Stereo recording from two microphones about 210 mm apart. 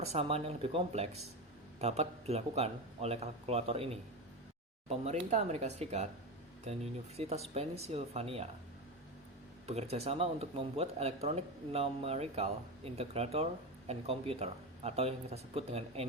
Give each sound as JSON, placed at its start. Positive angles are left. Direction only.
{"t": 0.0, "sound": "speech", "side_deg": -30}
{"t": 9.6, "sound": "speech", "side_deg": -30}